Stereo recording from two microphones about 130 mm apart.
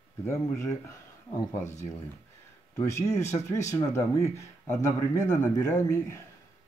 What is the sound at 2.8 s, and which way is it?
Speech, 20° left (ahead or behind).